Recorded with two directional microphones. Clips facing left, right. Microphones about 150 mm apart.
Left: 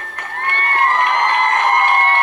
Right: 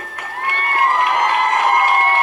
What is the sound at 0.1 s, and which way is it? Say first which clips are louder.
Crowd: left 1 dB; 10° right (ahead or behind).